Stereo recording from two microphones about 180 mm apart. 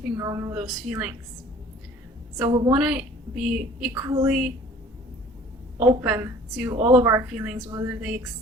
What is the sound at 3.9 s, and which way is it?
Speech, 15° right (ahead or behind).